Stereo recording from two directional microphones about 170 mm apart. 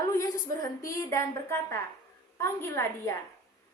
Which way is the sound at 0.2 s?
20° left (ahead or behind).